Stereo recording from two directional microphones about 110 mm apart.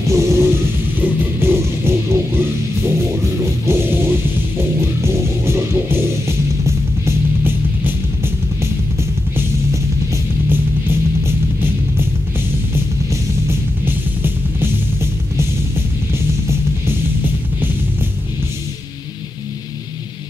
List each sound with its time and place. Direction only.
0.0 s music: 25° right (ahead or behind)
13.1 s music: 20° right (ahead or behind)